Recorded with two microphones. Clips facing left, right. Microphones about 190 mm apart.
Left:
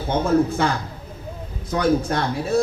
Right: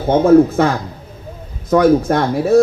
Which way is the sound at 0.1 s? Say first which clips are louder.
Right 9 dB; 55° right (ahead or behind).